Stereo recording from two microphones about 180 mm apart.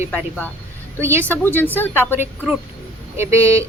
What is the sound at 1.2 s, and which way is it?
Speech, 10° left (ahead or behind).